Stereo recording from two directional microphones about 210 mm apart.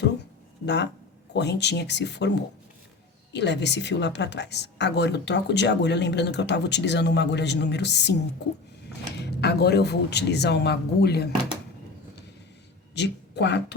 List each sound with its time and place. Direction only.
0.6 s a woman's voice: 55° left (ahead or behind)
9.2 s speech: 50° left (ahead or behind)
12.9 s speech: 55° left (ahead or behind)